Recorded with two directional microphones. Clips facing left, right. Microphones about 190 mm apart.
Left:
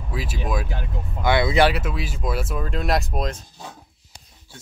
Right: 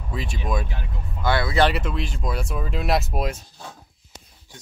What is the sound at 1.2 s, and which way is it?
Speech, 15° left (ahead or behind).